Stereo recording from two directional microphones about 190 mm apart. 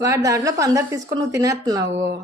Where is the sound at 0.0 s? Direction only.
15° right (ahead or behind).